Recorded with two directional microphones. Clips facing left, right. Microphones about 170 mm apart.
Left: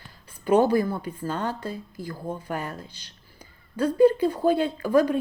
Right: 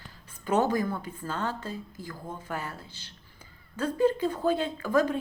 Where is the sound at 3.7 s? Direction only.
10° left (ahead or behind).